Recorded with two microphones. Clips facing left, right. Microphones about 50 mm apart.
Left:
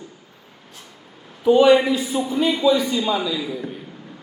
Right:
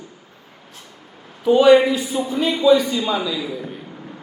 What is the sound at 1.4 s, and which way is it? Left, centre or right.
A man's voice, centre.